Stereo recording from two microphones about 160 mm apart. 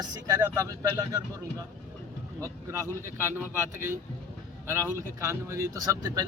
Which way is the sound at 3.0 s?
15° right (ahead or behind).